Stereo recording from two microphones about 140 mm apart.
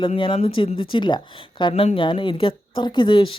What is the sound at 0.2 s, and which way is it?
Speech, 40° left (ahead or behind).